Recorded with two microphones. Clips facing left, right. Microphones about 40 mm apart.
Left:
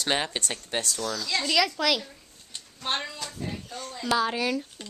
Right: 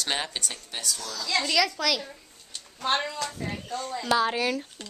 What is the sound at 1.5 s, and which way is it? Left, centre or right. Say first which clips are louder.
Speech: left 2 dB; centre.